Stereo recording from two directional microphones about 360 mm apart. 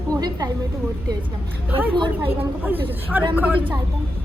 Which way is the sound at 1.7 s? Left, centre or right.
Centre.